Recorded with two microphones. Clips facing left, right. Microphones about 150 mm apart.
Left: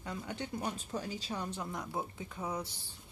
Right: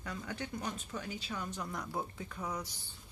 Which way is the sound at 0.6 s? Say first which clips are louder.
Left 3 dB; 30° left (ahead or behind).